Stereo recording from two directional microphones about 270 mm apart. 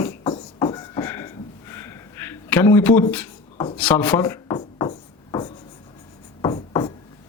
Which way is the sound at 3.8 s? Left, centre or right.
Centre.